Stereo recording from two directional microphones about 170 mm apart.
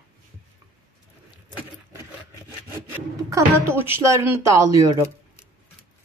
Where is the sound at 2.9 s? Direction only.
15° right (ahead or behind).